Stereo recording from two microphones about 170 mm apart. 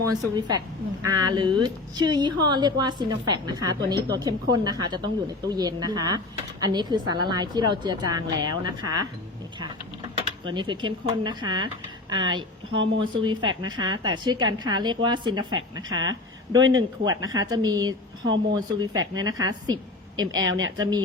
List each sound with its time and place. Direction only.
0.1 s a woman's voice: 25° right (ahead or behind)
10.2 s a woman's voice: 30° right (ahead or behind)